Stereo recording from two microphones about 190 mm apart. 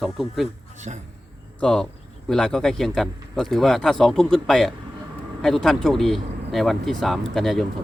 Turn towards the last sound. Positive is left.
turn(degrees=0)  # may be behind; listen again after turning